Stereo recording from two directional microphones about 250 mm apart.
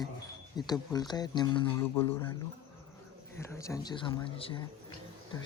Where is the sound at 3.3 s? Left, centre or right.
Centre.